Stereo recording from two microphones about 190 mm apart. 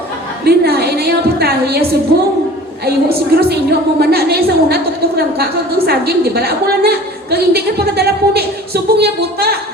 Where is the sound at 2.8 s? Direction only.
55° right (ahead or behind).